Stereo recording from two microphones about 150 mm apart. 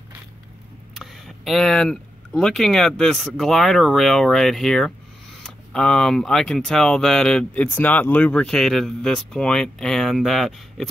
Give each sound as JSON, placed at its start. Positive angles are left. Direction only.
{"t": 0.9, "sound": "speech", "side_deg": 0}